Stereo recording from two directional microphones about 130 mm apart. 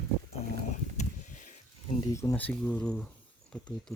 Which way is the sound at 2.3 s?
10° left (ahead or behind).